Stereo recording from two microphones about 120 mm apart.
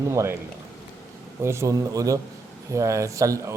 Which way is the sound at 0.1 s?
25° right (ahead or behind).